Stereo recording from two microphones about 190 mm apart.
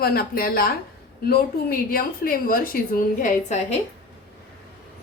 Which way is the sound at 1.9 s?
50° left (ahead or behind).